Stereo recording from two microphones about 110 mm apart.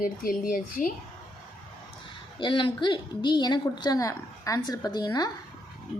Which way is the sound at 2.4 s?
50° left (ahead or behind).